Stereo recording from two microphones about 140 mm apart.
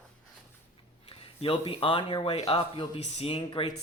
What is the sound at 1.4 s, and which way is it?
Speech, 40° left (ahead or behind).